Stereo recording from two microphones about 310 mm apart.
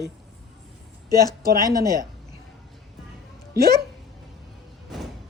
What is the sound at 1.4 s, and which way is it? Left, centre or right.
Speech, right.